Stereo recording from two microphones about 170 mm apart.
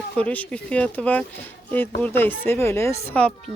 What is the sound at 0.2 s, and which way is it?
A woman's voice, 5° left (ahead or behind).